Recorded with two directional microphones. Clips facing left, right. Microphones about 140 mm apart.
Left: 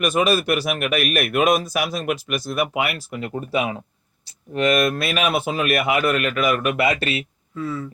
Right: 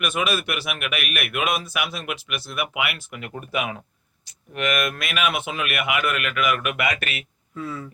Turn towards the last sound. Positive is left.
turn(degrees=0)  # may be behind; listen again after turning